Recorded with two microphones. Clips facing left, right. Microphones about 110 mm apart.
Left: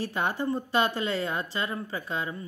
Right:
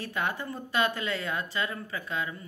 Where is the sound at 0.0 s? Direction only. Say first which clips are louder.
Left 4 dB; 30° left (ahead or behind).